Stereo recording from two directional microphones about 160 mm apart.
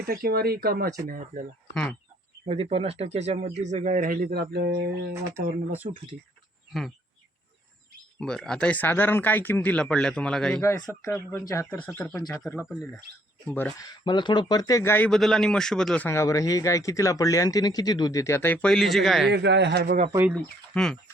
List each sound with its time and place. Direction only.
0.0 s speech: 65° right (ahead or behind)
1.0 s speech: 60° right (ahead or behind)
1.7 s speech: 5° left (ahead or behind)
2.5 s speech: 35° right (ahead or behind); by 5.1 s 90° right
5.3 s speech: 10° right (ahead or behind)
8.2 s speech: 5° left (ahead or behind)
10.6 s speech: 15° left (ahead or behind)
13.5 s speech: 10° left (ahead or behind)
13.7 s speech: 25° left (ahead or behind); by 16.0 s 5° left (ahead or behind)
16.0 s speech: 15° left (ahead or behind); by 19.3 s centre (ahead or behind)
19.3 s a man's voice: 90° right; by 20.1 s 60° right (ahead or behind)
20.3 s speech: 5° left (ahead or behind)